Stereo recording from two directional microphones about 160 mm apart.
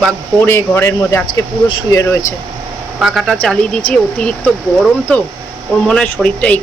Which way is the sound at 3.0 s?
Centre (ahead or behind).